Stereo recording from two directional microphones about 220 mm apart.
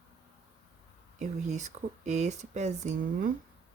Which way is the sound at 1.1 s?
30° right (ahead or behind).